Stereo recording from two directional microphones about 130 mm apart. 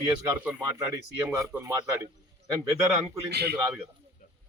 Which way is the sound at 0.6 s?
25° right (ahead or behind).